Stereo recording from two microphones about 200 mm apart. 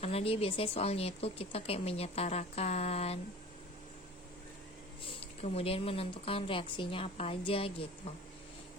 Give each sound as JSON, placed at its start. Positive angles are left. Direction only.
{"t": 0.0, "sound": "speech", "side_deg": 30}
{"t": 5.0, "sound": "speech", "side_deg": 30}